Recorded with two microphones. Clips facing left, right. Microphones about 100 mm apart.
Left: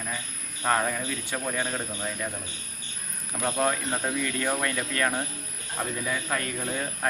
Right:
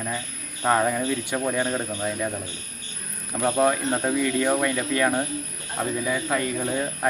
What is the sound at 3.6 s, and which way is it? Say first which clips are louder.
Speech: right 5 dB; 15° right (ahead or behind).